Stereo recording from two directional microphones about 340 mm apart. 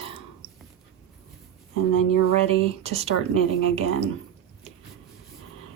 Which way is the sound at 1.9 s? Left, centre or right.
Left.